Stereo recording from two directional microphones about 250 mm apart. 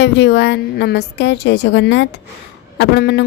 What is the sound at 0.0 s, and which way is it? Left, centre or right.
A woman's voice, left.